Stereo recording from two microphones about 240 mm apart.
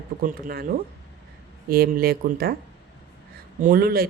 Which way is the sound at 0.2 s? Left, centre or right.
Right.